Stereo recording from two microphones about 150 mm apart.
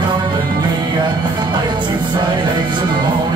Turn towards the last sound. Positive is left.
turn(degrees=-30)  # may be behind; listen again after turning